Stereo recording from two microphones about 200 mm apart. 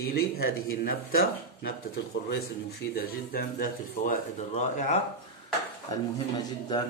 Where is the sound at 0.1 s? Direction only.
50° left (ahead or behind).